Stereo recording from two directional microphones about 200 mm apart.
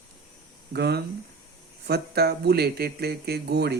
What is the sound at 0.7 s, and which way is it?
Speech, 55° right (ahead or behind).